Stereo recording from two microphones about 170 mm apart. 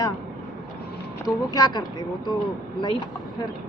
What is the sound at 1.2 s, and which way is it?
Speech, 20° left (ahead or behind).